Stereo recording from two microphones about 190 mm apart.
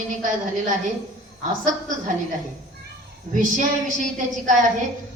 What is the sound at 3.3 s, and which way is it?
A woman's voice, 40° right (ahead or behind).